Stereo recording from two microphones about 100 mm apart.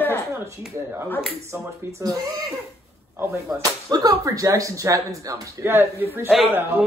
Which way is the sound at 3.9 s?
40° right (ahead or behind).